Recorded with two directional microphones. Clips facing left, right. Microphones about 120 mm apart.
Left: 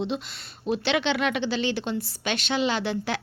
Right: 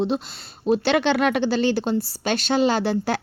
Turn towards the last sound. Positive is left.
turn(degrees=-40)  # may be behind; listen again after turning